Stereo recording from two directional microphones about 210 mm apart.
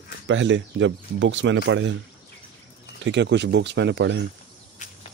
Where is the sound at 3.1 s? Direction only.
55° right (ahead or behind).